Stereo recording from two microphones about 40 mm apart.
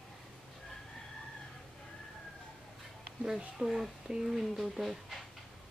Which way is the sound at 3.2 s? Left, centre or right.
Centre.